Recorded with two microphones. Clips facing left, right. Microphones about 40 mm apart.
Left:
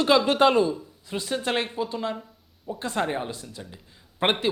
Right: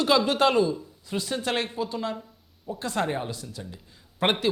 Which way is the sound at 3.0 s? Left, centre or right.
Centre.